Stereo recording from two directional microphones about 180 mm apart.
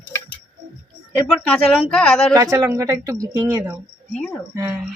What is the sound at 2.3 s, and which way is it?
Speech, 15° right (ahead or behind).